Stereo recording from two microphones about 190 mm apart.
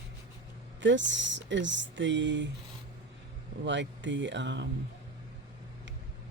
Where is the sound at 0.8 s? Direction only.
70° right (ahead or behind).